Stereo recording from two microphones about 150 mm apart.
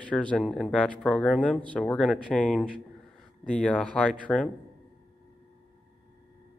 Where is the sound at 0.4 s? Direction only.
Centre (ahead or behind).